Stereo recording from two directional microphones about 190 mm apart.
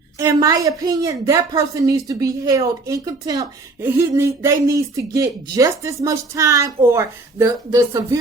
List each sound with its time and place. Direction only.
0.3 s a woman's voice: 20° right (ahead or behind)